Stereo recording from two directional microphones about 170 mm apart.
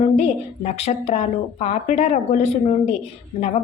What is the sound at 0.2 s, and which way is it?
A woman's voice, 40° left (ahead or behind).